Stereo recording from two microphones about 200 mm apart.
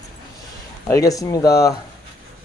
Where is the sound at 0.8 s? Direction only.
15° left (ahead or behind).